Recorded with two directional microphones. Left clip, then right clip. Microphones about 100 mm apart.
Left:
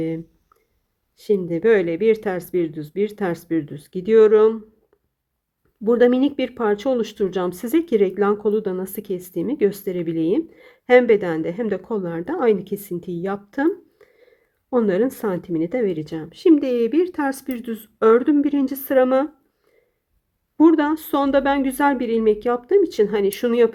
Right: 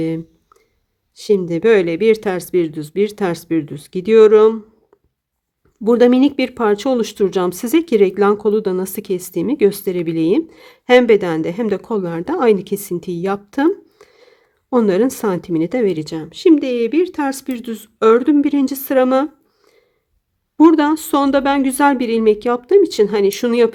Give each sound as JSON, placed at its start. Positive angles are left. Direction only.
{"t": 1.1, "sound": "speech", "side_deg": -30}
{"t": 5.8, "sound": "speech", "side_deg": -30}
{"t": 20.6, "sound": "speech", "side_deg": -30}